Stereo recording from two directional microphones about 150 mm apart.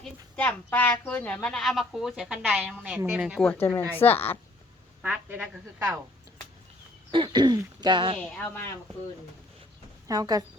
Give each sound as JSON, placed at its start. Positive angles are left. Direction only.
{"t": 0.0, "sound": "speech", "side_deg": 10}
{"t": 3.4, "sound": "a woman's voice", "side_deg": 10}
{"t": 5.0, "sound": "speech", "side_deg": -10}
{"t": 7.1, "sound": "speech", "side_deg": -30}
{"t": 8.2, "sound": "a woman's voice", "side_deg": 15}
{"t": 10.1, "sound": "speech", "side_deg": -25}